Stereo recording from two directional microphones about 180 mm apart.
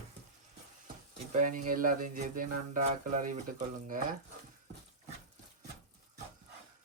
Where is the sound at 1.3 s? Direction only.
45° right (ahead or behind).